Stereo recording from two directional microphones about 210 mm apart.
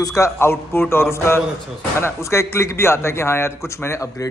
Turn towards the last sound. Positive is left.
turn(degrees=15)  # may be behind; listen again after turning